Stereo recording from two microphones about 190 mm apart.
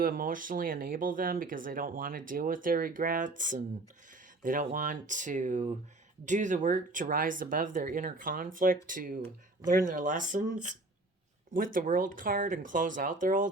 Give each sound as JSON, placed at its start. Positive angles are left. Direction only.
{"t": 0.0, "sound": "speech", "side_deg": -45}